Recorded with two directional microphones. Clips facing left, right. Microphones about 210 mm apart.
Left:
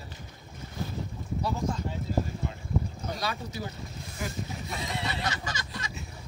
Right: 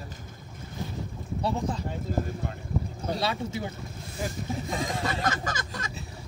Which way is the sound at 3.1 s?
25° right (ahead or behind).